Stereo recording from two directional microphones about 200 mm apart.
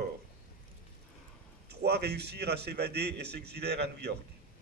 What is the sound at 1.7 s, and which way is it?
A man's voice, 55° right (ahead or behind).